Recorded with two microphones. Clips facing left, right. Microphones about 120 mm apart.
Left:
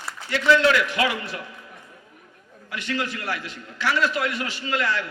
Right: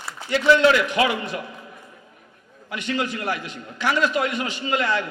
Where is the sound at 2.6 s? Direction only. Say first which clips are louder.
Right 2 dB; 20° right (ahead or behind).